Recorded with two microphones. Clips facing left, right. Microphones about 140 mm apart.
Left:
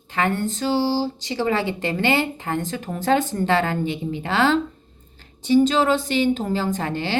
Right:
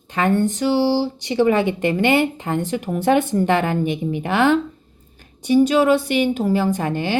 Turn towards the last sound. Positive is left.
turn(degrees=-15)  # may be behind; listen again after turning